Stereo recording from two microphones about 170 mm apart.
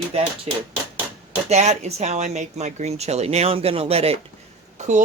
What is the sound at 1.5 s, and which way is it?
Speech, 40° right (ahead or behind).